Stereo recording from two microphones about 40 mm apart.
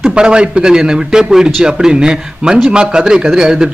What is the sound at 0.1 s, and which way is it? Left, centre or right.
A man's voice, right.